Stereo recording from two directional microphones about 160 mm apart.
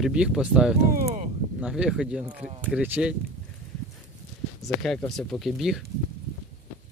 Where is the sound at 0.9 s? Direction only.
50° right (ahead or behind).